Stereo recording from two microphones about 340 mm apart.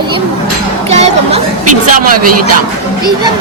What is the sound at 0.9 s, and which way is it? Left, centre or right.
Chatter, centre.